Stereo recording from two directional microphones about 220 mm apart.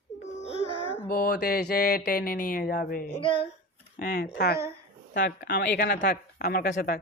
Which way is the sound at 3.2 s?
25° left (ahead or behind).